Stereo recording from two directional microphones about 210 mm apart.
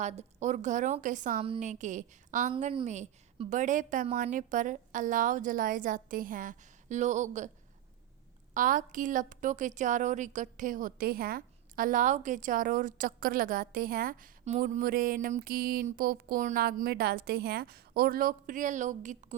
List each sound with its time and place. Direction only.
0.0 s a woman's voice: 30° right (ahead or behind)
8.5 s a woman's voice: 40° right (ahead or behind)